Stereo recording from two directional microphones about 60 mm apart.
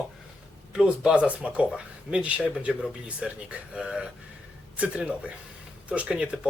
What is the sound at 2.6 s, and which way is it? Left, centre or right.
Speech, centre.